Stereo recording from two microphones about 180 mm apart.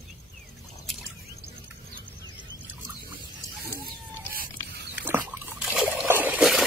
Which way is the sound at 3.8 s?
55° right (ahead or behind).